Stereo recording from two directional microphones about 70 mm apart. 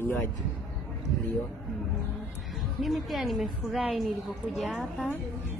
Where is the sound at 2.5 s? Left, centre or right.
Centre.